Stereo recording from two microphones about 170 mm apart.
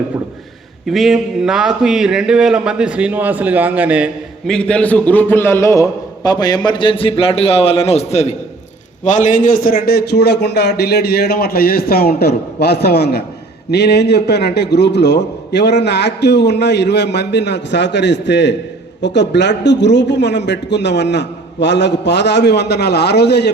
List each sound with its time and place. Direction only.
0.9 s a man's voice: centre (ahead or behind)
4.4 s a man's voice: 5° left (ahead or behind); by 23.5 s 80° left